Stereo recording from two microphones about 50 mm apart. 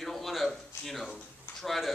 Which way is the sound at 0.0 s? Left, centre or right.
Centre.